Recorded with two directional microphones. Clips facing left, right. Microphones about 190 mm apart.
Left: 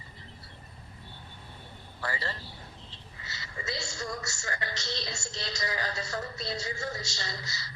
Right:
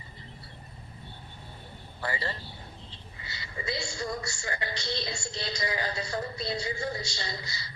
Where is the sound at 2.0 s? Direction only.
25° right (ahead or behind).